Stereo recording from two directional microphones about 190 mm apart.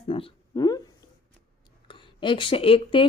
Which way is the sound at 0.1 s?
25° left (ahead or behind).